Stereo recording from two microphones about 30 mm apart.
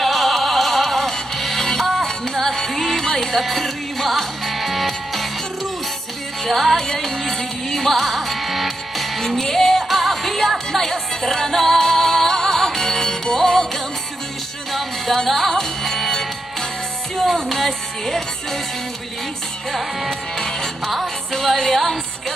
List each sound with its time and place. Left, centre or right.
0.0 s music: centre
3.3 s music: centre
6.4 s music: centre
9.4 s music: centre
14.7 s music: centre
19.7 s music: centre